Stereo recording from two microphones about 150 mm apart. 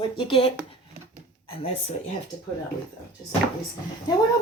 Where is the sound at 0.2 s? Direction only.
35° left (ahead or behind).